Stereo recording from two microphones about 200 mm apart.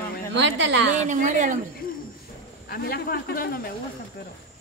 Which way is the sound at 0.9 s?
40° right (ahead or behind).